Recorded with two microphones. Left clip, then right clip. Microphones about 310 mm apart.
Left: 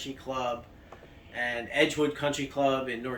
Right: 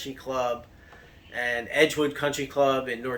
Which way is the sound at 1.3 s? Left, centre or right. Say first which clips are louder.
Right 4 dB; centre.